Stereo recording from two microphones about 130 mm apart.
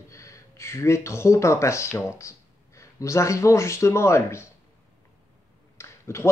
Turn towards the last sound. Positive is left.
turn(degrees=20)  # may be behind; listen again after turning